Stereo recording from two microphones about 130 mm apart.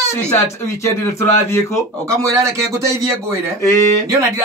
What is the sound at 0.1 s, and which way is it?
Speech, 20° left (ahead or behind).